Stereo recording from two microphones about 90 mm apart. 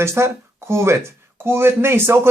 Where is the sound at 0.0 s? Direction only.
30° right (ahead or behind).